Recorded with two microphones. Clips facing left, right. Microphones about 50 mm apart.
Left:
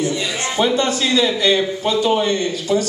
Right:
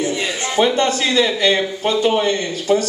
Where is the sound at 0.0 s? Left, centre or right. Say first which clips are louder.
Even; right.